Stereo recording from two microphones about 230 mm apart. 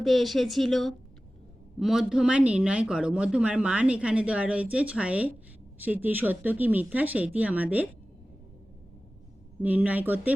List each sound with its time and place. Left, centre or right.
0.0 s speech: centre
9.6 s speech: centre